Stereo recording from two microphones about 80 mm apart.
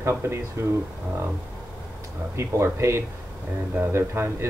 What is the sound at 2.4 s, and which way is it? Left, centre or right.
A man's voice, right.